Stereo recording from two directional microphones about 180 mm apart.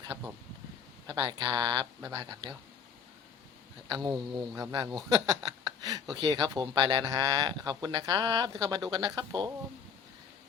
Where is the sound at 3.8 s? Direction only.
25° right (ahead or behind).